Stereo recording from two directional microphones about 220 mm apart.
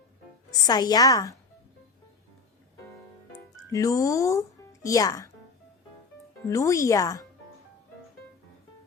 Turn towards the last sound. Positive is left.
turn(degrees=15)  # may be behind; listen again after turning